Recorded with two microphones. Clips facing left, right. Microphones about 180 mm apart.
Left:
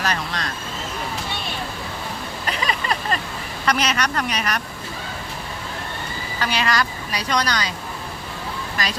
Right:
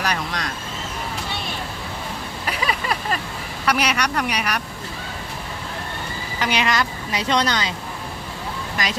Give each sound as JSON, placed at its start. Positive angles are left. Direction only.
{"t": 0.0, "sound": "speech", "side_deg": -15}
{"t": 2.5, "sound": "vehicle", "side_deg": -5}
{"t": 3.7, "sound": "speech", "side_deg": -10}
{"t": 6.4, "sound": "a woman's voice", "side_deg": -20}
{"t": 8.8, "sound": "speech", "side_deg": -15}